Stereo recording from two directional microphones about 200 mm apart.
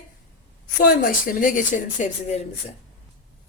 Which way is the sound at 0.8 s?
45° left (ahead or behind).